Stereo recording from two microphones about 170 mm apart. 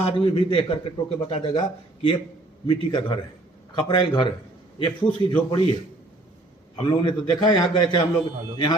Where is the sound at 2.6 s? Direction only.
30° left (ahead or behind).